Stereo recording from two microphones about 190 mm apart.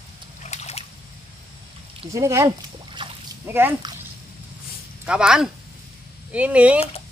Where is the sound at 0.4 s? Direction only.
35° left (ahead or behind).